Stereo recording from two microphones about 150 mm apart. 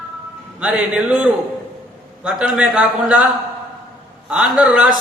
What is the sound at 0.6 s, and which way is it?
A man's voice, 5° right (ahead or behind).